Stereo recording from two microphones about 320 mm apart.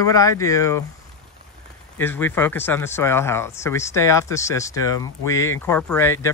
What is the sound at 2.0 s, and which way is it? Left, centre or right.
Speech, centre.